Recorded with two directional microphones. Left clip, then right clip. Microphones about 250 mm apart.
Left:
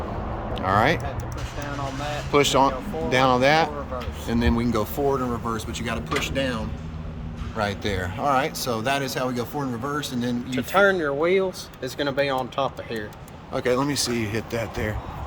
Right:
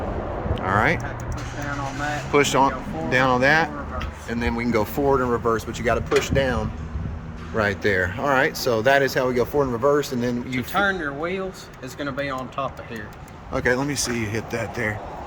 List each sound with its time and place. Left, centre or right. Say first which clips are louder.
0.7 s speech: even; centre
2.3 s speech: even; centre
10.8 s speech: left 4 dB; centre
13.5 s speech: right 1 dB; centre